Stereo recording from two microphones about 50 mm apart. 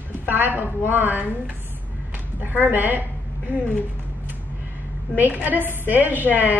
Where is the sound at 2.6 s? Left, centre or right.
Right.